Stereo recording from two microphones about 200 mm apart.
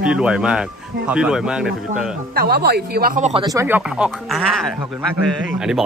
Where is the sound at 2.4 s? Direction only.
50° right (ahead or behind).